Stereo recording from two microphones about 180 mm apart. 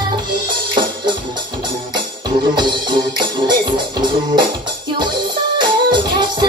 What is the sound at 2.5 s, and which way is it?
Music, 25° right (ahead or behind).